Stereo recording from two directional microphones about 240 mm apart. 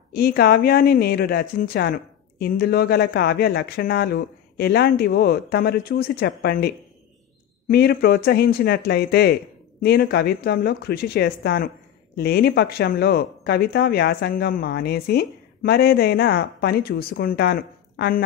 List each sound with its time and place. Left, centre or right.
0.1 s speech: left